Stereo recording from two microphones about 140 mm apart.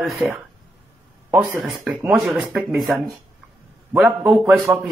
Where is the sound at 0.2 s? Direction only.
15° right (ahead or behind); by 3.0 s centre (ahead or behind).